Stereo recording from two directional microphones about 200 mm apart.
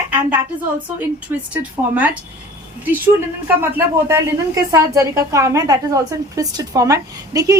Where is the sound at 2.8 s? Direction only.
10° right (ahead or behind).